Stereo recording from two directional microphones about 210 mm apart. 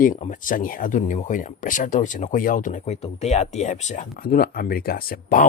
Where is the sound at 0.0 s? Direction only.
40° left (ahead or behind).